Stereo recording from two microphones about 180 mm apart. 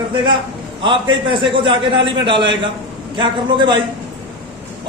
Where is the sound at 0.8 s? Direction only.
30° right (ahead or behind).